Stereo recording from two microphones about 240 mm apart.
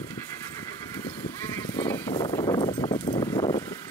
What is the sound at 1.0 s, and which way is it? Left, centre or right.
Neigh, centre.